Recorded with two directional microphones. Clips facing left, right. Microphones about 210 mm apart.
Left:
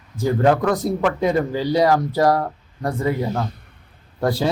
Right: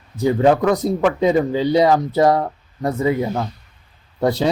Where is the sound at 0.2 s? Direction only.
20° right (ahead or behind).